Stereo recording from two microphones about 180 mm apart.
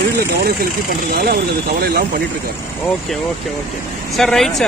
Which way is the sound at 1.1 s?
55° right (ahead or behind).